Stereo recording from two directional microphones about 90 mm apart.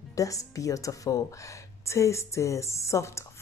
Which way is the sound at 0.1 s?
35° left (ahead or behind).